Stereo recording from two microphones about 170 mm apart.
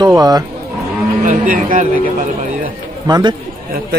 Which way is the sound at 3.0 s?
25° right (ahead or behind).